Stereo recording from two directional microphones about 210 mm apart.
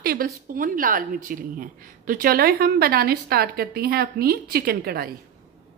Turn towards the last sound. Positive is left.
turn(degrees=-45)  # may be behind; listen again after turning